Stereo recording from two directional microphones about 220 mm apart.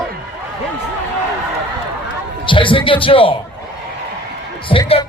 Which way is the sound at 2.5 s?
20° left (ahead or behind).